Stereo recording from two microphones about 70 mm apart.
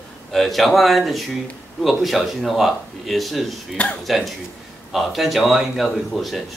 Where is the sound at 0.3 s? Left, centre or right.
Centre.